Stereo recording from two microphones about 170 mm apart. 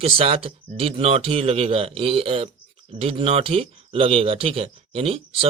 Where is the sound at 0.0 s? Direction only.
35° right (ahead or behind).